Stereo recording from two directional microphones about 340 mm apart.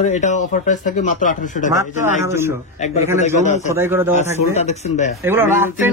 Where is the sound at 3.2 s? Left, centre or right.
Left.